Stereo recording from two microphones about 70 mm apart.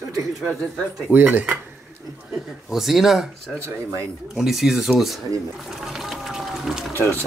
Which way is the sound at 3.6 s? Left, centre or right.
Right.